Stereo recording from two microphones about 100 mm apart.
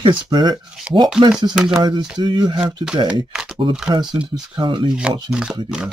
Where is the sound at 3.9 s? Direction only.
45° right (ahead or behind).